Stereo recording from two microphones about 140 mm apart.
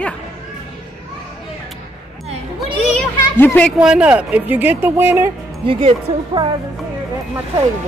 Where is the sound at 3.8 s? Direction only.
5° right (ahead or behind).